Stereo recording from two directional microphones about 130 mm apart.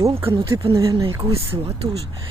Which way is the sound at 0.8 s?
25° right (ahead or behind).